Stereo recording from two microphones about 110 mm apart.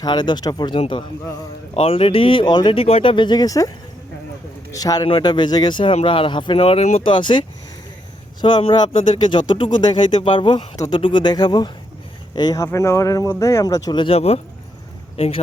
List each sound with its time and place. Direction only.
0.0 s speech: 40° left (ahead or behind)
1.7 s speech: 60° left (ahead or behind); by 2.7 s 45° left (ahead or behind)
2.7 s speech: 60° left (ahead or behind); by 3.7 s 35° left (ahead or behind)
4.7 s speech: 35° left (ahead or behind)
5.9 s speech: 60° left (ahead or behind)
7.0 s speech: 45° left (ahead or behind)
10.8 s speech: 40° left (ahead or behind)
14.0 s speech: 60° left (ahead or behind)